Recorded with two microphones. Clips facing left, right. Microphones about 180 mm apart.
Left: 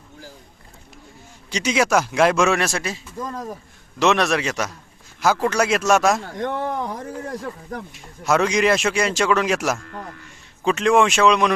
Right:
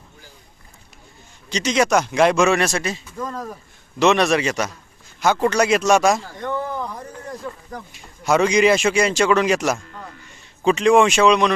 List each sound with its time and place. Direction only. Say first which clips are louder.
1.5 s speech: right 1 dB; 10° left (ahead or behind)
3.2 s speech: right 1 dB; 20° left (ahead or behind)
4.0 s speech: right 2 dB; centre (ahead or behind)
6.3 s speech: left 1 dB; 80° left
7.9 s speech: right 2 dB; centre (ahead or behind)